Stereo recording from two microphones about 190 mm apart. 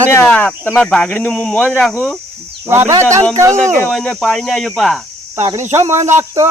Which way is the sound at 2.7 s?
15° right (ahead or behind).